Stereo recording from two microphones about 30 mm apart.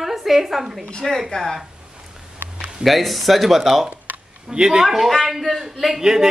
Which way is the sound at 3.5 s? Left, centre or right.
Centre.